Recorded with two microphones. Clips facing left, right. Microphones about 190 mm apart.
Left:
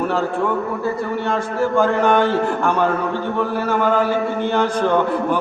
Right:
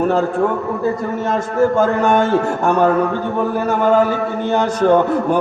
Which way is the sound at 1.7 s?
45° right (ahead or behind).